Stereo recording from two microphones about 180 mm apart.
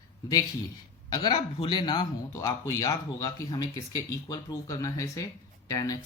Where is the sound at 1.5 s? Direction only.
30° left (ahead or behind).